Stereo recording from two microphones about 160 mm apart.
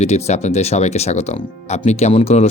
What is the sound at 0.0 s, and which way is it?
Speech, 45° left (ahead or behind).